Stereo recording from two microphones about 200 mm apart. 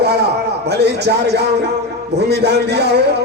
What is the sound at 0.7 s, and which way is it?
A man's voice, 55° right (ahead or behind).